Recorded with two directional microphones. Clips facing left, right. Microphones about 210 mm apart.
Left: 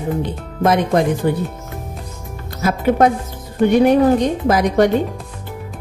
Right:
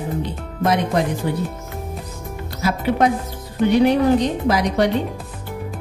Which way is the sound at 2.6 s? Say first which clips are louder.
Left 4 dB; 50° left (ahead or behind).